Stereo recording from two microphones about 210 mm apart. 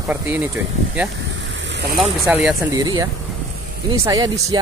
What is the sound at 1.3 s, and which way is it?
Vehicle, 60° right (ahead or behind).